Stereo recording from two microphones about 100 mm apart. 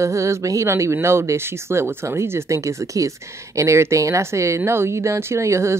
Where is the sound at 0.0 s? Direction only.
30° right (ahead or behind).